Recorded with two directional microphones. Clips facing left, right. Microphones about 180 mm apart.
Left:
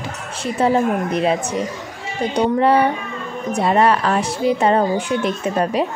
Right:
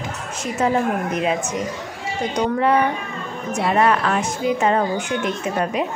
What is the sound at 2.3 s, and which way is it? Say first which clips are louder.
A woman's voice: left 3 dB; 30° left (ahead or behind).